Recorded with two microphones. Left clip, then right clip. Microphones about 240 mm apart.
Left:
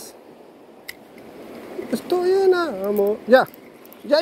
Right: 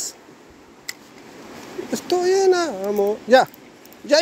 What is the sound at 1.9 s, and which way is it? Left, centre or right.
A child's voice, centre.